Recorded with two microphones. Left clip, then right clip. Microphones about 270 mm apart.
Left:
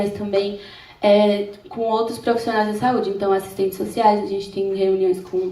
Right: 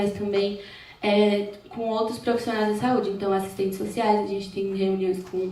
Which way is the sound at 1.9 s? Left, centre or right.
Centre.